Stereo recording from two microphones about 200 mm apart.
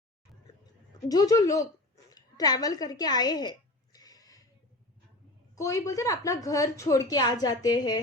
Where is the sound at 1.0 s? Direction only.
20° left (ahead or behind).